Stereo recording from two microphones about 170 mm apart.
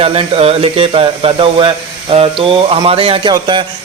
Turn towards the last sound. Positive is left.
turn(degrees=-25)  # may be behind; listen again after turning